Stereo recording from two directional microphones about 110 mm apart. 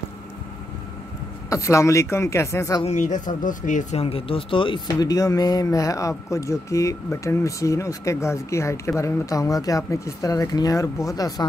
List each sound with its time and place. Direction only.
1.5 s speech: 30° left (ahead or behind)
2.8 s a man's voice: 90° left
3.9 s speech: 60° left (ahead or behind)
4.9 s speech: 35° left (ahead or behind)